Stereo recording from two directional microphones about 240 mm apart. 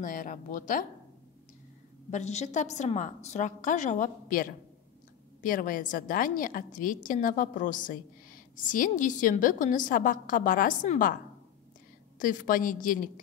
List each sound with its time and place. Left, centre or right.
0.0 s a woman's voice: left
2.0 s a woman's voice: left
12.2 s a woman's voice: left